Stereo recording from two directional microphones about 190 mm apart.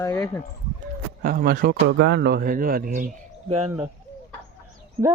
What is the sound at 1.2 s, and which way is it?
A man's voice, 50° right (ahead or behind).